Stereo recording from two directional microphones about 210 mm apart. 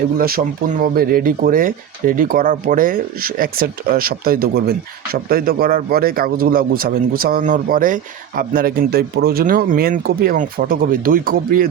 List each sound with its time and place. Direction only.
0.2 s a man's voice: 45° right (ahead or behind)